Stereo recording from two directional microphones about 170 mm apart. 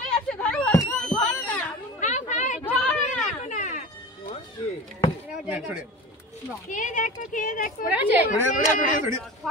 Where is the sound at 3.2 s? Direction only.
45° left (ahead or behind).